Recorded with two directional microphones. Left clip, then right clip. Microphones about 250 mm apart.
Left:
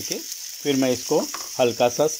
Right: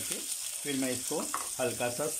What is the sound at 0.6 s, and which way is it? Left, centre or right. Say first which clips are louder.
Frying: left 13 dB; left.